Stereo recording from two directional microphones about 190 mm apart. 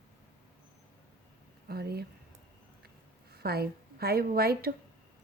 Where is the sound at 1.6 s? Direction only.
55° right (ahead or behind).